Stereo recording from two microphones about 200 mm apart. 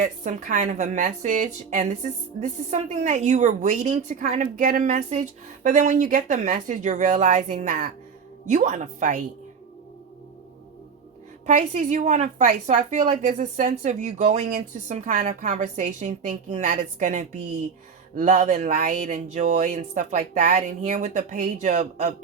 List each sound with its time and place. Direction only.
0.0 s a woman's voice: 40° right (ahead or behind)
11.4 s a woman's voice: 35° right (ahead or behind)